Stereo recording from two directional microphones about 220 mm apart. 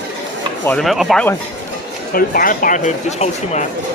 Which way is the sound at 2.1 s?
40° left (ahead or behind).